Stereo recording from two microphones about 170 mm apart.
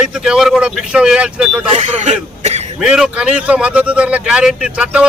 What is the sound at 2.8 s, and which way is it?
Speech, 5° right (ahead or behind).